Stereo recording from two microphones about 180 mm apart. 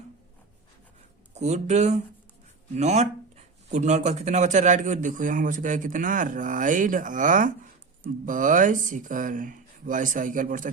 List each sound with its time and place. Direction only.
1.3 s speech: 40° right (ahead or behind)